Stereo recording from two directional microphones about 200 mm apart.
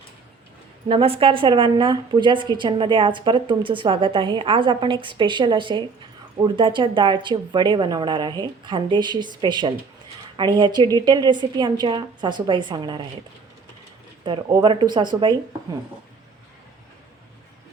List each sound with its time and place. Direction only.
0.9 s a woman's voice: 25° right (ahead or behind)
14.3 s a woman's voice: 20° right (ahead or behind)